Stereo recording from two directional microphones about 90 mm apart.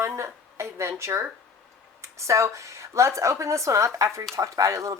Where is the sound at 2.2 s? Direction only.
35° right (ahead or behind).